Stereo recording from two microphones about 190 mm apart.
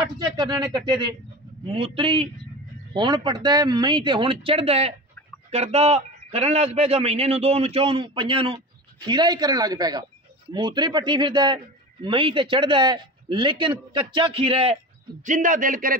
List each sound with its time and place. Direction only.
0.0 s a man's voice: 20° right (ahead or behind)
15.2 s a man's voice: 45° right (ahead or behind)